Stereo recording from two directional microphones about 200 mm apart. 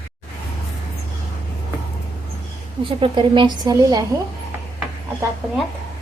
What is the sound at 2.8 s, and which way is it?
A woman's voice, 25° right (ahead or behind).